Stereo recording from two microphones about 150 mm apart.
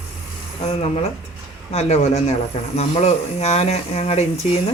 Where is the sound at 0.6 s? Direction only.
40° left (ahead or behind).